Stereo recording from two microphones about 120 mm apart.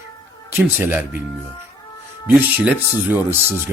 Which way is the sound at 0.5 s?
20° right (ahead or behind).